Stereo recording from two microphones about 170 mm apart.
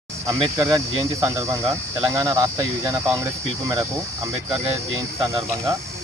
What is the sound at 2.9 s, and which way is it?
Speech, 15° right (ahead or behind).